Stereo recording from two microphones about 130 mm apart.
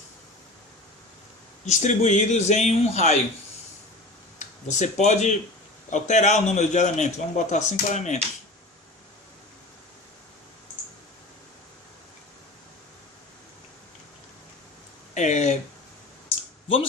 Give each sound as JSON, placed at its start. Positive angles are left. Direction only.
{"t": 1.6, "sound": "a man's voice", "side_deg": 60}
{"t": 4.4, "sound": "a man's voice", "side_deg": 65}
{"t": 15.1, "sound": "speech", "side_deg": 65}